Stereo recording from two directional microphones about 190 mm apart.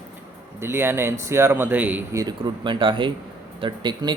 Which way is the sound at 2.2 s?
25° right (ahead or behind).